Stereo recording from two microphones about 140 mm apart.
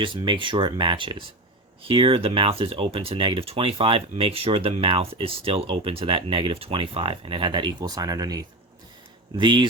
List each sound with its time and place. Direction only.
0.0 s speech: 35° right (ahead or behind)